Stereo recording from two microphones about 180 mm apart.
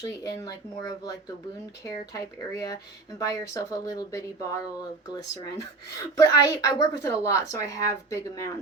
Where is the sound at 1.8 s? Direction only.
15° left (ahead or behind).